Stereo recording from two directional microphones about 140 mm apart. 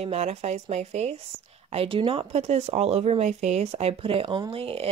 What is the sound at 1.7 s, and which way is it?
Speech, 40° right (ahead or behind).